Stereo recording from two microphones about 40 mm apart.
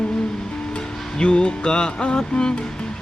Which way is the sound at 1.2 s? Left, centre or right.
Left.